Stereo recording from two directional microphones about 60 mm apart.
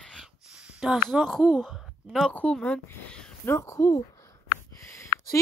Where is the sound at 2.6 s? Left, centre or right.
Centre.